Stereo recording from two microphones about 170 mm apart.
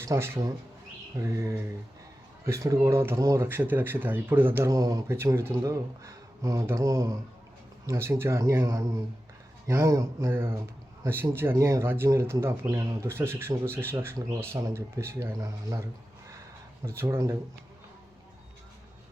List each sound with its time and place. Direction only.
0.0 s speech: 15° right (ahead or behind)
1.1 s a sound: 20° right (ahead or behind)
2.5 s speech: 20° right (ahead or behind)
16.8 s speech: 15° right (ahead or behind)